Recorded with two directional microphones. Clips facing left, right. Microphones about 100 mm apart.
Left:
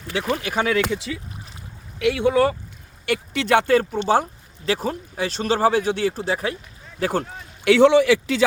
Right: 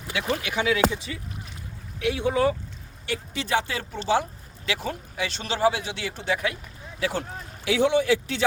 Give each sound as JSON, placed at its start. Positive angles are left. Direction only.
{"t": 0.1, "sound": "speech", "side_deg": 35}
{"t": 0.9, "sound": "speech", "side_deg": 80}
{"t": 7.0, "sound": "speech", "side_deg": 50}
{"t": 7.7, "sound": "speech", "side_deg": 80}